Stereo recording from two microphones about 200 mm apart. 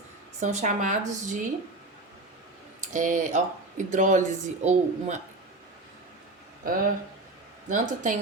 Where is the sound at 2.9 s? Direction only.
40° right (ahead or behind).